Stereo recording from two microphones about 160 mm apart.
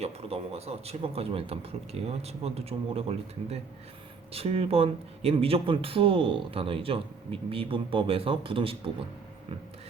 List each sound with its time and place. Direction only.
0.0 s speech: 40° right (ahead or behind)